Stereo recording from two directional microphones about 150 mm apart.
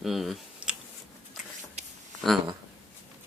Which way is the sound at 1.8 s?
50° right (ahead or behind).